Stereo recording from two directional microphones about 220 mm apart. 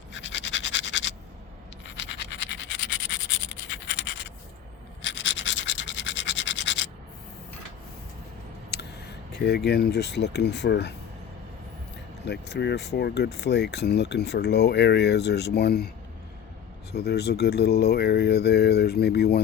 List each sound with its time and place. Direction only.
0.1 s scratch: 55° left (ahead or behind)
8.7 s speech: 50° left (ahead or behind)
12.2 s speech: 50° left (ahead or behind)
16.9 s speech: 45° left (ahead or behind)